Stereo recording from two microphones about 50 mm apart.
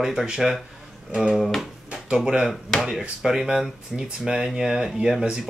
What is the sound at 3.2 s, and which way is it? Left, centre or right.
Speech, centre.